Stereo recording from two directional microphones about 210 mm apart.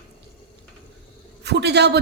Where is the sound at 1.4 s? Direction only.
55° right (ahead or behind).